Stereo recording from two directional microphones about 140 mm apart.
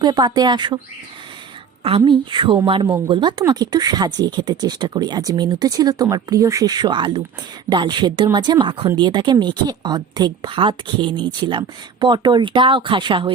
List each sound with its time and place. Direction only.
0.0 s speech: 30° right (ahead or behind)
2.0 s speech: 35° right (ahead or behind)